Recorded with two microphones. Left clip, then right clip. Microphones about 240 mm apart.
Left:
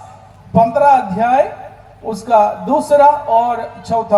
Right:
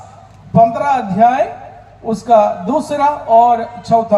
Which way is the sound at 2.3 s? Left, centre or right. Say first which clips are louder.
Right 1 dB; right.